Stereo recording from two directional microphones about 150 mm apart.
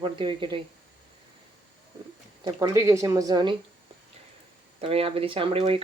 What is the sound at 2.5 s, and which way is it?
Speech, 20° right (ahead or behind).